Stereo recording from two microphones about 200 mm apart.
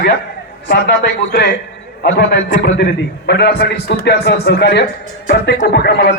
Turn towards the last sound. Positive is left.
turn(degrees=55)  # may be behind; listen again after turning